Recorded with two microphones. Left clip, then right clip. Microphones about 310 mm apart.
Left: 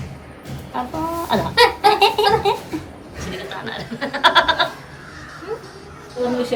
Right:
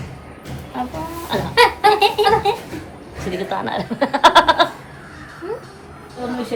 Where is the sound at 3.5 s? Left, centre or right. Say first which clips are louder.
Right 6 dB; centre.